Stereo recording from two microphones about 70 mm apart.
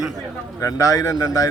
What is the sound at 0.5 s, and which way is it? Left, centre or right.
Speech, left.